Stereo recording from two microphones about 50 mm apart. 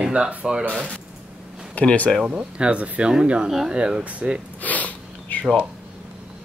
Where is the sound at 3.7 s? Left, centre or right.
Right.